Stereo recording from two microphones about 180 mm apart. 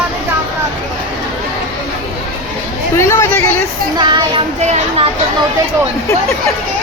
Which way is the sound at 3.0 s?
15° left (ahead or behind).